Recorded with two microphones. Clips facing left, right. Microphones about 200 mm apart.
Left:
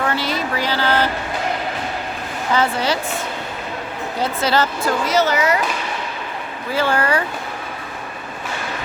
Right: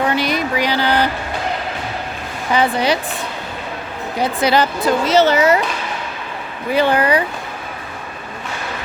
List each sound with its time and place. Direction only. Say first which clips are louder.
0.0 s a sound: right 4 dB; 15° right (ahead or behind)
2.5 s speech: right 3 dB; 15° right (ahead or behind)
4.2 s speech: right 3 dB; 15° right (ahead or behind)
4.9 s speech: right 6 dB; 25° right (ahead or behind)
6.7 s speech: right 4 dB; 15° right (ahead or behind)